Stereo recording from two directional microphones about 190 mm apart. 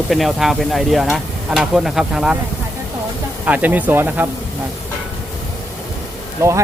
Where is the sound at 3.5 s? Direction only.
10° right (ahead or behind).